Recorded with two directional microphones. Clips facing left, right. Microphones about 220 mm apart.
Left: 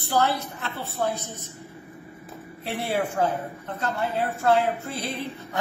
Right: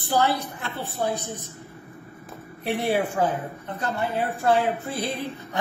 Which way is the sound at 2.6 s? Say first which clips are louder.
Right 4 dB; 15° right (ahead or behind).